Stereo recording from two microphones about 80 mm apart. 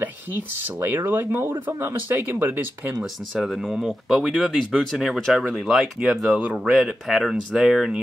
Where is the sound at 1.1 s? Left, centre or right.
Right.